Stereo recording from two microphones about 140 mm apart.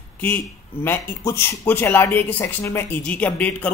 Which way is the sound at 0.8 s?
15° left (ahead or behind).